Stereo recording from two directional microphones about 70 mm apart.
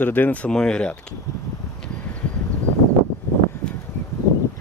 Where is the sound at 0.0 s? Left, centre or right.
Left.